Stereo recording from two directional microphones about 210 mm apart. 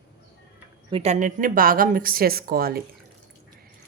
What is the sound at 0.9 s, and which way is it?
A woman's voice, 30° right (ahead or behind).